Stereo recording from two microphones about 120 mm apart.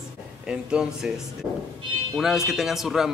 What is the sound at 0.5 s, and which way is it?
A man's voice, 5° right (ahead or behind).